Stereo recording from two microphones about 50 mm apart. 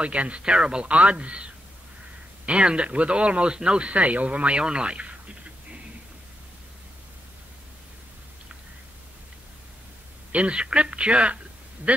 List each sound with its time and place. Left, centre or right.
0.0 s speech: right
10.3 s speech: right